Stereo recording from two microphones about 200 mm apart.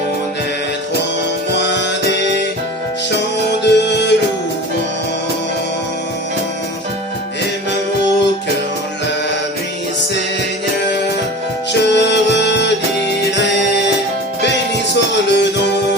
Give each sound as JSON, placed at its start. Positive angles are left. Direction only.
{"t": 3.6, "sound": "music", "side_deg": 60}
{"t": 11.8, "sound": "music", "side_deg": 60}
{"t": 14.9, "sound": "music", "side_deg": 60}